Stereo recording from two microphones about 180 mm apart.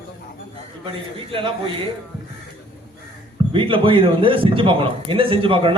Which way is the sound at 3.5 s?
30° right (ahead or behind).